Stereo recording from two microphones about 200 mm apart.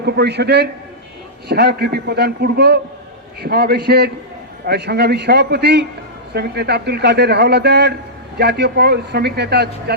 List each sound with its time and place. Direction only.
0.0 s a man's voice: 55° right (ahead or behind)